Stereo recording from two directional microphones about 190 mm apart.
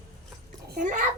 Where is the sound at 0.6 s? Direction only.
45° right (ahead or behind).